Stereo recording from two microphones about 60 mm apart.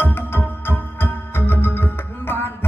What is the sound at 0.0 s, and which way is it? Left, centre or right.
Music, left.